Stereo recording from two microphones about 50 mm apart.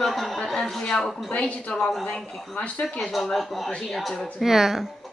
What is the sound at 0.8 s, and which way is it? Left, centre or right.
Speech, centre.